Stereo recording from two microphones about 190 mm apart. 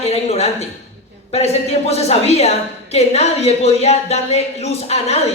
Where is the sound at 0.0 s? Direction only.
35° left (ahead or behind).